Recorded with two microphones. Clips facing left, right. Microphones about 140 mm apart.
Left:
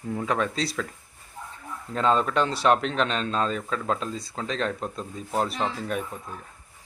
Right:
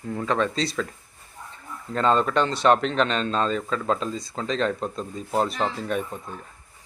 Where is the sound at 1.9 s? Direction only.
Centre (ahead or behind).